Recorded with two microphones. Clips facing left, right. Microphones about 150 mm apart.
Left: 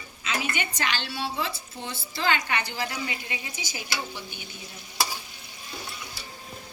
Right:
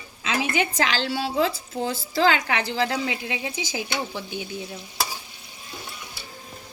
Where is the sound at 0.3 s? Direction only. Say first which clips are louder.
Right 6 dB; 90° right.